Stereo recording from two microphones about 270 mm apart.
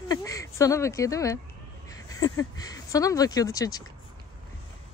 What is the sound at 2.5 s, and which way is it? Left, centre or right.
Speech, centre.